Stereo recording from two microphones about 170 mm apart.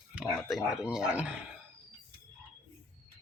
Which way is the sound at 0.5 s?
5° right (ahead or behind).